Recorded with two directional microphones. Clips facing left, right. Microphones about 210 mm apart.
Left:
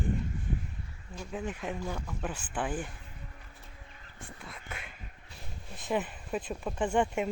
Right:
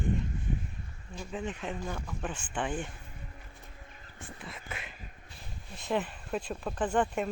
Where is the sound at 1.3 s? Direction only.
10° left (ahead or behind).